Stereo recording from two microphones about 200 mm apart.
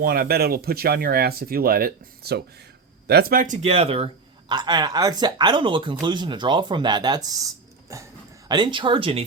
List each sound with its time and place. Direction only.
0.0 s speech: 50° right (ahead or behind); by 9.2 s 30° right (ahead or behind)